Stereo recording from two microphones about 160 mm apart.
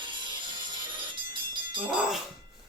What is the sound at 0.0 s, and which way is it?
Music, 30° right (ahead or behind).